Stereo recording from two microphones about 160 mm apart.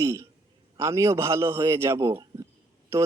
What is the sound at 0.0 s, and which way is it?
A man's voice, 20° right (ahead or behind).